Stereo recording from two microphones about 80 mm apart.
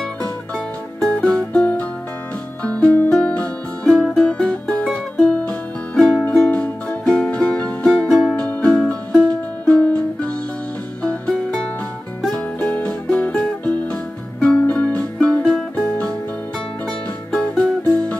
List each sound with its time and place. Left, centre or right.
0.9 s music: centre
5.9 s music: centre
12.4 s music: centre
17.3 s music: centre